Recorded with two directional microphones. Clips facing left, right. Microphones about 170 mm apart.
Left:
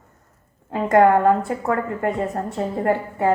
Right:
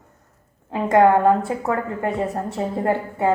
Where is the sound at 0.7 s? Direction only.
20° right (ahead or behind).